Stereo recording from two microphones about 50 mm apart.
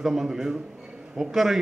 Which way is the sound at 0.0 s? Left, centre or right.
Centre.